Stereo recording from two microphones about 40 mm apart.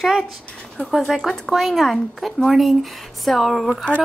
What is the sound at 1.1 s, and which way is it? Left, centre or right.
A woman's voice, centre.